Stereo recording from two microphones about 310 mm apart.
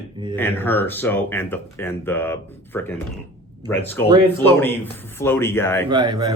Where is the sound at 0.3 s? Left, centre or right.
Centre.